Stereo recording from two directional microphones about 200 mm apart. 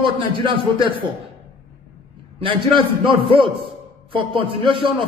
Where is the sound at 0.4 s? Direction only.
25° right (ahead or behind).